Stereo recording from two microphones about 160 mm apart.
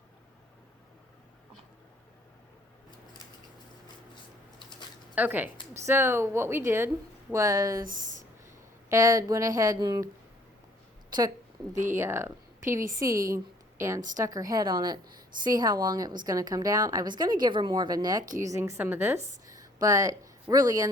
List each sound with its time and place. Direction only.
5.1 s speech: 10° right (ahead or behind)
8.9 s a woman's voice: 20° right (ahead or behind)
11.9 s a woman's voice: 15° right (ahead or behind)